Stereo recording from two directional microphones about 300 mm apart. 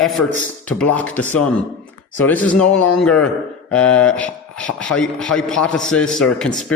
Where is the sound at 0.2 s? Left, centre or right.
Left.